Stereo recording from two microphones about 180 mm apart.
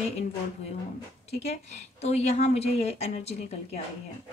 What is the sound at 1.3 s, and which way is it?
A woman's voice, 35° left (ahead or behind).